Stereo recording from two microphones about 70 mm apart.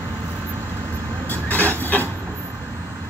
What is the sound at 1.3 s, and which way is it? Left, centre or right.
Vehicle, left.